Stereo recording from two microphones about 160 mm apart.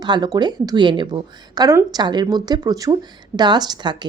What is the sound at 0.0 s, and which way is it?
Speech, 25° right (ahead or behind).